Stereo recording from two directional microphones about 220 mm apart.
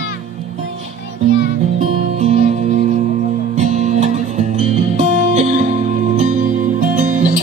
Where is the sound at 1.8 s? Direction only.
35° right (ahead or behind).